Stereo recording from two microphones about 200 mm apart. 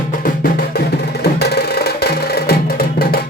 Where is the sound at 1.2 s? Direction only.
55° left (ahead or behind).